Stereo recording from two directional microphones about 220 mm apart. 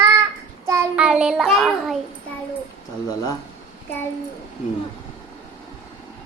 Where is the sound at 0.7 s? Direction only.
10° right (ahead or behind).